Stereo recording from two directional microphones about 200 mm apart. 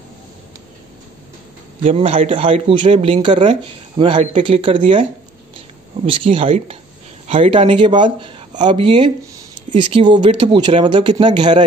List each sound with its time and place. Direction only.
1.8 s speech: 30° right (ahead or behind)
6.0 s speech: 25° right (ahead or behind)